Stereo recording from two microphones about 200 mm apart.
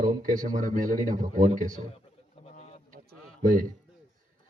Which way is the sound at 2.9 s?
40° right (ahead or behind).